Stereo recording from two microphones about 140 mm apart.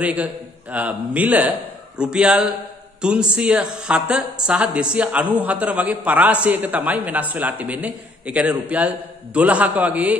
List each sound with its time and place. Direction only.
0.0 s a man's voice: 10° right (ahead or behind)